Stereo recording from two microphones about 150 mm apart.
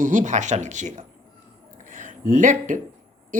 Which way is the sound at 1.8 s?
60° right (ahead or behind).